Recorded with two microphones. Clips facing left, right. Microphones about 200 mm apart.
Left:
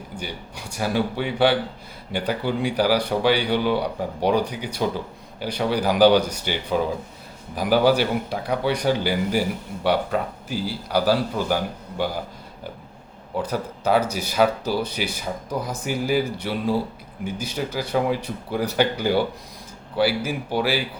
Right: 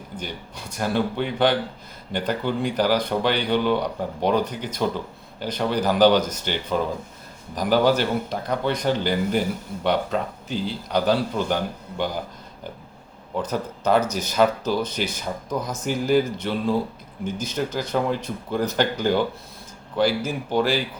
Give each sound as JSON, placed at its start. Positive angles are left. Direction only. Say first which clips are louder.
{"t": 0.2, "sound": "speech", "louder": "even", "side_deg": 10}
{"t": 13.4, "sound": "speech", "louder": "even", "side_deg": 10}